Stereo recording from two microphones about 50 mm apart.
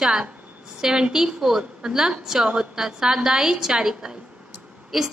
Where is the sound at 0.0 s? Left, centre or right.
Centre.